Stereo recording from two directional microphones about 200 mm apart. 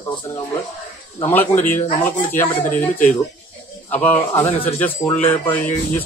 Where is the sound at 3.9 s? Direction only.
10° left (ahead or behind).